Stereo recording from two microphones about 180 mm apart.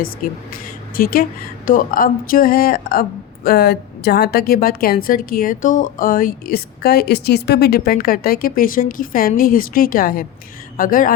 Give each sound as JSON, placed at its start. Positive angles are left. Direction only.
{"t": 0.2, "sound": "speech", "side_deg": 50}